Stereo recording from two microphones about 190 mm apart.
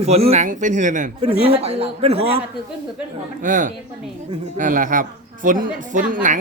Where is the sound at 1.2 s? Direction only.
30° right (ahead or behind).